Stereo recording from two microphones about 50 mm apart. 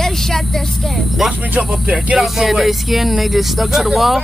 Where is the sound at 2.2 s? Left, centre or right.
Centre.